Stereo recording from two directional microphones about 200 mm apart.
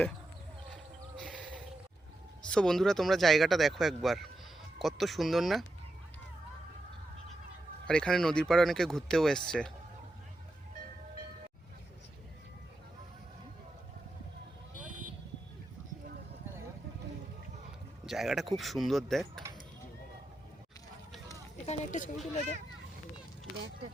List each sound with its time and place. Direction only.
1.2 s a sound: 5° left (ahead or behind)
2.5 s speech: 5° left (ahead or behind)
7.9 s speech: 5° left (ahead or behind)
18.0 s speech: centre (ahead or behind)
21.7 s speech: 40° left (ahead or behind)